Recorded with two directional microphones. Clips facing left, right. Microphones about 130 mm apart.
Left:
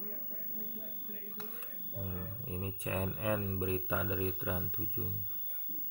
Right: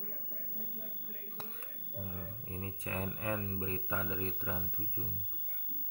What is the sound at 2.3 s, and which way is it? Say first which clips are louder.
Speech: left 3 dB; 15° left (ahead or behind).